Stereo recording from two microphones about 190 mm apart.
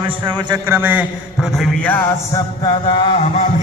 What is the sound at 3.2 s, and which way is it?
Music, 40° left (ahead or behind).